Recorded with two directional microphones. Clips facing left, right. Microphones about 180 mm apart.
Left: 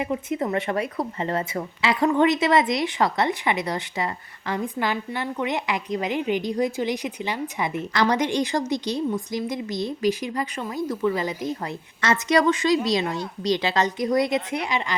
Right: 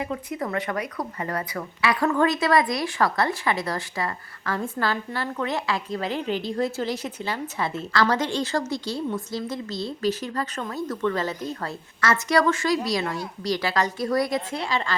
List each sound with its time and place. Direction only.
0.0 s a woman's voice: 20° left (ahead or behind)